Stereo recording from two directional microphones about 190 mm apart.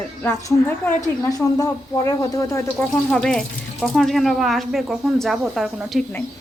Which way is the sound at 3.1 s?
5° left (ahead or behind).